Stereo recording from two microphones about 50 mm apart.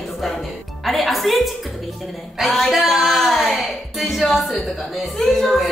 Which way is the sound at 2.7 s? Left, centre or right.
Centre.